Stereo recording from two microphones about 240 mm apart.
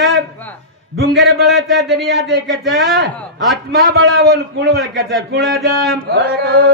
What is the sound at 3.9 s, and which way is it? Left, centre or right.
Speech, right.